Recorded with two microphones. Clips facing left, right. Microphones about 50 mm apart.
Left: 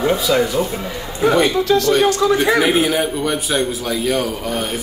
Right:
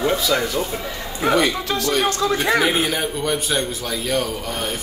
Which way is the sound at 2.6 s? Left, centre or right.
Centre.